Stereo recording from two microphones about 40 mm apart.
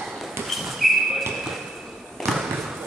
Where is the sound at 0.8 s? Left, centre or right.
Centre.